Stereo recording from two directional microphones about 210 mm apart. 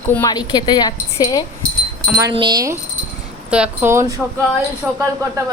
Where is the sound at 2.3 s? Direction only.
20° right (ahead or behind).